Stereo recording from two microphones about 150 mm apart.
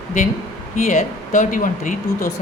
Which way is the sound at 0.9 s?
55° left (ahead or behind).